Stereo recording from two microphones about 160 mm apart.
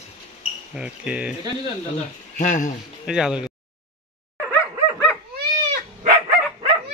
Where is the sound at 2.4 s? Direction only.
50° left (ahead or behind).